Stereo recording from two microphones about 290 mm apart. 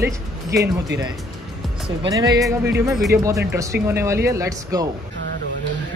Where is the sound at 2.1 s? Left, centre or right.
Centre.